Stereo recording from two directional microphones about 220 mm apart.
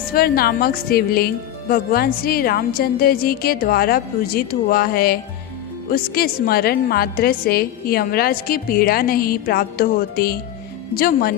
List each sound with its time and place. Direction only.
0.1 s a woman's voice: 45° left (ahead or behind)